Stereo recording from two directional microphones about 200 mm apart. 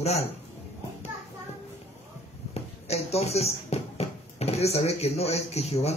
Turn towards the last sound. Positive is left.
turn(degrees=30)  # may be behind; listen again after turning